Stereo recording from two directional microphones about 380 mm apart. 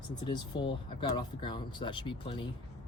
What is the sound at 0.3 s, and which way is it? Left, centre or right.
Speech, centre.